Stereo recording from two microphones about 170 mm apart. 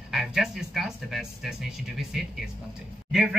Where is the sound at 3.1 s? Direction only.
Centre (ahead or behind).